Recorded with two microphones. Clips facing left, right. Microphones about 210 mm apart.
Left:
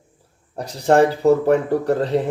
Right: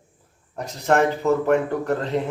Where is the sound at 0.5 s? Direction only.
35° left (ahead or behind).